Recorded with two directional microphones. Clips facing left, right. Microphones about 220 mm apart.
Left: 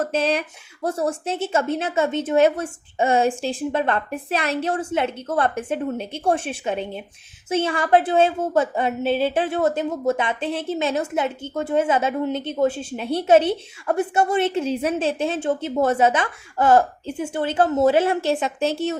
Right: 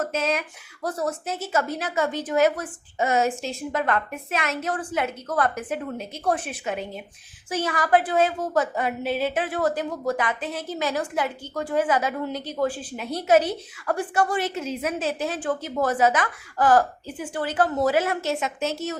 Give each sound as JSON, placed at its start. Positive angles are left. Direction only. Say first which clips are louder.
{"t": 0.0, "sound": "a woman's voice", "louder": "left 4 dB", "side_deg": 30}